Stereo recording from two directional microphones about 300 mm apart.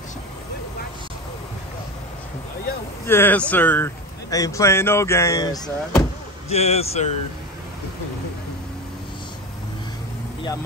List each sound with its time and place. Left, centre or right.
3.1 s a man's voice: centre